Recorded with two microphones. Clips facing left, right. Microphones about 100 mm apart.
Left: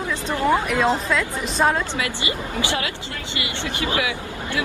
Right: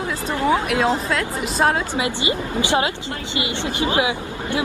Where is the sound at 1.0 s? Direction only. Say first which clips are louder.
Even; centre (ahead or behind).